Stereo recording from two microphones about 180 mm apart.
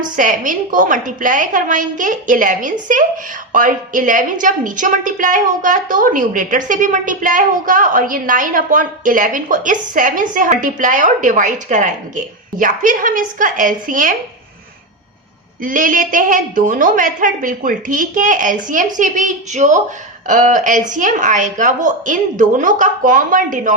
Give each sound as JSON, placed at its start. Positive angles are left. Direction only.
{"t": 0.0, "sound": "a woman's voice", "side_deg": -45}
{"t": 15.6, "sound": "a woman's voice", "side_deg": -50}